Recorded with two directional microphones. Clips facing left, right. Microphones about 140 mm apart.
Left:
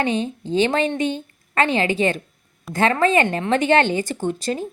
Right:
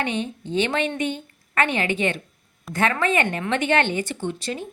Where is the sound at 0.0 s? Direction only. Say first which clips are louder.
Left 4 dB; 35° left (ahead or behind).